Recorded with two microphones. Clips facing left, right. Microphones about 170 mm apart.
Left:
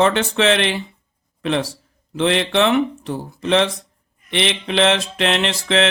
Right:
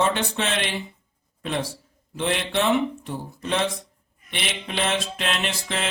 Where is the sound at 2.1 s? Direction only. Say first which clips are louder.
Left 7 dB; 90° left.